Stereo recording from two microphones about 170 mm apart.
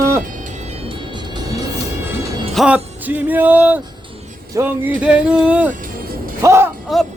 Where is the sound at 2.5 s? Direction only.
5° right (ahead or behind).